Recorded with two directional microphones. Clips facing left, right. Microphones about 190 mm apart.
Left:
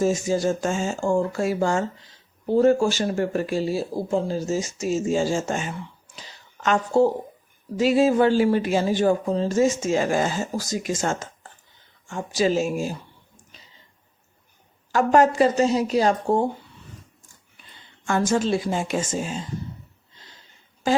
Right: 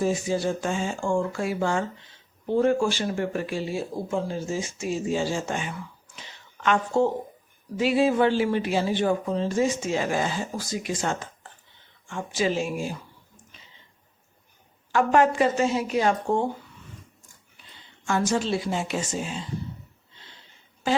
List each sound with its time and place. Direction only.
0.0 s speech: 45° left (ahead or behind)
5.7 s a sound: 30° left (ahead or behind)
7.8 s speech: 40° left (ahead or behind)
14.9 s speech: 40° left (ahead or behind)
18.0 s speech: 50° left (ahead or behind)